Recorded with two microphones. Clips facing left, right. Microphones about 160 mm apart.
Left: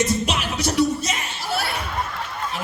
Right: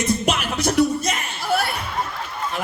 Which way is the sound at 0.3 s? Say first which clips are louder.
Right 3 dB; 50° right (ahead or behind).